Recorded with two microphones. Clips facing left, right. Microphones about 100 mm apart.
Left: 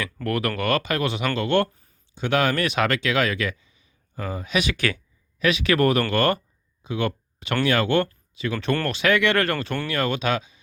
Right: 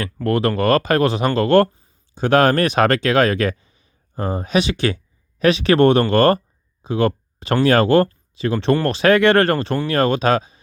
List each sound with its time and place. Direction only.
0.3 s speech: 30° right (ahead or behind)